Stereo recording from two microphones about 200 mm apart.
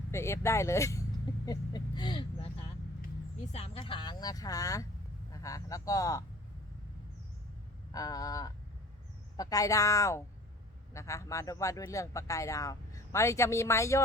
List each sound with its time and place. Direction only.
0.1 s speech: 15° left (ahead or behind)
1.5 s vehicle: 20° left (ahead or behind)
3.0 s speech: 35° left (ahead or behind); by 6.2 s 15° left (ahead or behind)
7.9 s speech: 15° left (ahead or behind)